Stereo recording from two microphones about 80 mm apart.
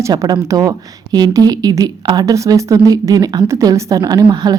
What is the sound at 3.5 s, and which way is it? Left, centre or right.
A woman's voice, right.